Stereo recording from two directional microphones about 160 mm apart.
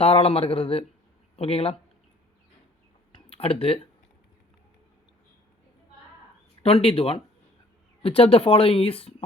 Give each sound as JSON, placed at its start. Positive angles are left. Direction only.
{"t": 0.0, "sound": "speech", "side_deg": 40}
{"t": 3.2, "sound": "speech", "side_deg": 35}
{"t": 6.6, "sound": "speech", "side_deg": 40}